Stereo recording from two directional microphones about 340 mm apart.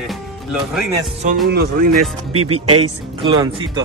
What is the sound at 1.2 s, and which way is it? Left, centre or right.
Speech, right.